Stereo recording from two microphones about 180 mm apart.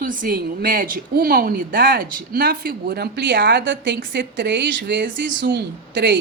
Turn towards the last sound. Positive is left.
turn(degrees=-75)  # may be behind; listen again after turning